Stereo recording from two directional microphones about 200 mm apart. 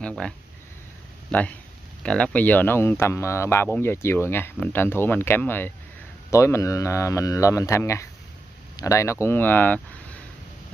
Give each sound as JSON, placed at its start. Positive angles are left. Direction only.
{"t": 0.0, "sound": "speech", "side_deg": 5}
{"t": 1.3, "sound": "speech", "side_deg": 5}